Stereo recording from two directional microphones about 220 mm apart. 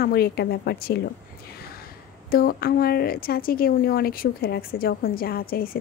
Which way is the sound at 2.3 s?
40° left (ahead or behind).